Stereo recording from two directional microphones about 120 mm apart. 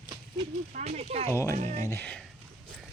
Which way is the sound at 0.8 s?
70° right (ahead or behind).